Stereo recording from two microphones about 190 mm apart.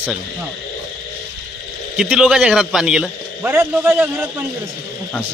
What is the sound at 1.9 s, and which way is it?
A man's voice, 5° right (ahead or behind).